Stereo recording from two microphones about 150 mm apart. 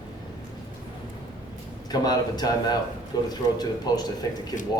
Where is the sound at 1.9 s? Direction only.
25° left (ahead or behind).